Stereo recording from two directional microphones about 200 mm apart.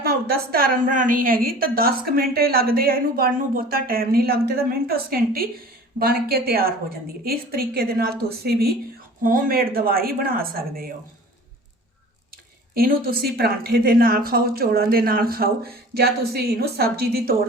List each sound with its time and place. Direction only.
0.0 s a woman's voice: 50° right (ahead or behind)
12.7 s a woman's voice: 50° right (ahead or behind)